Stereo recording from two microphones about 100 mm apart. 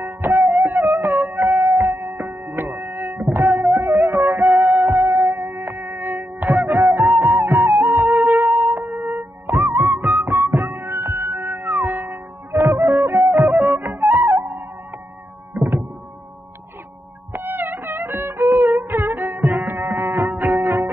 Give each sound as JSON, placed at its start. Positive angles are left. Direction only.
{"t": 0.2, "sound": "music", "side_deg": -25}
{"t": 4.5, "sound": "music", "side_deg": -5}
{"t": 4.8, "sound": "music", "side_deg": -30}
{"t": 12.6, "sound": "music", "side_deg": -30}
{"t": 13.7, "sound": "music", "side_deg": -20}
{"t": 15.5, "sound": "thunk", "side_deg": -30}
{"t": 17.3, "sound": "music", "side_deg": -20}